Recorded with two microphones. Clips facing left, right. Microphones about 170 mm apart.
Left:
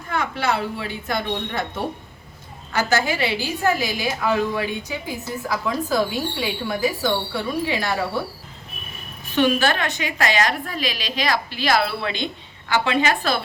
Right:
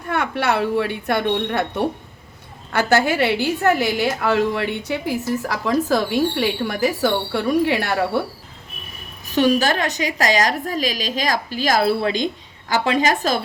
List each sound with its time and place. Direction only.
0.1 s a woman's voice: 65° right (ahead or behind)
9.3 s a woman's voice: 40° right (ahead or behind)